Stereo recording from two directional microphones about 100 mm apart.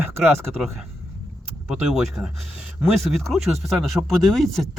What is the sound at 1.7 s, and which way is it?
Speech, 5° right (ahead or behind).